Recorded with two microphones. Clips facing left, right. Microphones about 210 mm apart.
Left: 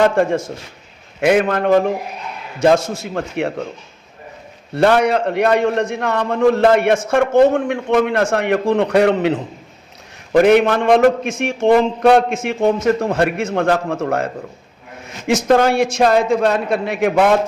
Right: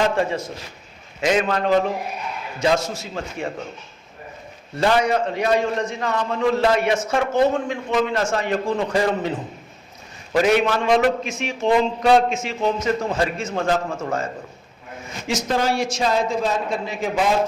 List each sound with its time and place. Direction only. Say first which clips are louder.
0.0 s a man's voice: left 6 dB; 50° left (ahead or behind)
4.7 s a man's voice: left 5 dB; 60° left (ahead or behind)
10.3 s a man's voice: left 6 dB; 55° left (ahead or behind)
15.4 s a man's voice: left 8 dB; 60° left (ahead or behind)